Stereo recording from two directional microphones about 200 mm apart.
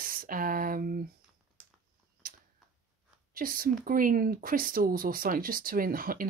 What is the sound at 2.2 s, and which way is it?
Tick-tock, 45° right (ahead or behind).